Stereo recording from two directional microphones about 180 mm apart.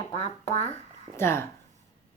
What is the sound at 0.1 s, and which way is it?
Speech, 35° left (ahead or behind).